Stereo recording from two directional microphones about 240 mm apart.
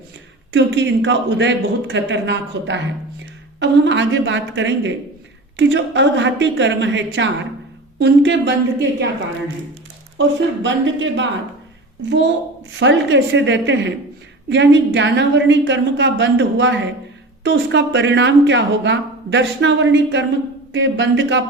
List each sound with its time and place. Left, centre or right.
0.5 s speech: right
10.2 s speech: right